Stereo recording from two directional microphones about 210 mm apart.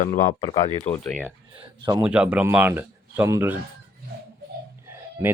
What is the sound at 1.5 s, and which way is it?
Speech, 20° right (ahead or behind).